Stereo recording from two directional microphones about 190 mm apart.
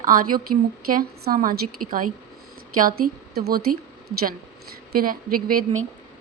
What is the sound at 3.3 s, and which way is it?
Speech, 55° right (ahead or behind).